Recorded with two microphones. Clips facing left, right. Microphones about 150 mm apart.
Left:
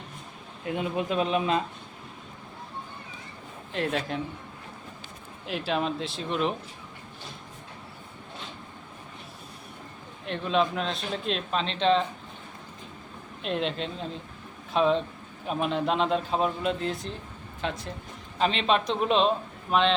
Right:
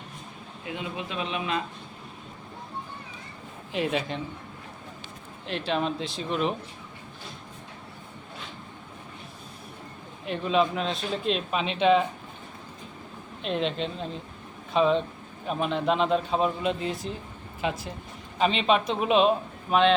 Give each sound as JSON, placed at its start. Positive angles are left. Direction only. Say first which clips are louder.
{"t": 0.7, "sound": "speech", "louder": "left 6 dB", "side_deg": 45}
{"t": 3.7, "sound": "a man's voice", "louder": "right 1 dB", "side_deg": -5}
{"t": 5.5, "sound": "a man's voice", "louder": "even", "side_deg": 5}
{"t": 10.2, "sound": "a man's voice", "louder": "right 1 dB", "side_deg": 0}
{"t": 13.4, "sound": "a man's voice", "louder": "right 1 dB", "side_deg": 0}